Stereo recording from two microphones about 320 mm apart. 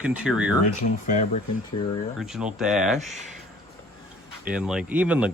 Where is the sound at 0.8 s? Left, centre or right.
Left.